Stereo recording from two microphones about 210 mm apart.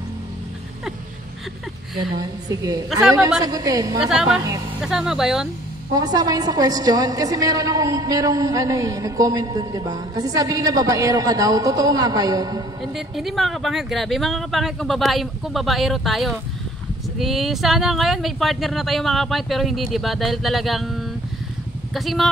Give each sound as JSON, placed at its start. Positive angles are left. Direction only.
{"t": 2.1, "sound": "a woman's voice", "side_deg": -15}
{"t": 2.9, "sound": "speech", "side_deg": -5}
{"t": 3.4, "sound": "a woman's voice", "side_deg": -20}
{"t": 4.0, "sound": "speech", "side_deg": -5}
{"t": 5.9, "sound": "a woman's voice", "side_deg": -20}
{"t": 12.8, "sound": "speech", "side_deg": 0}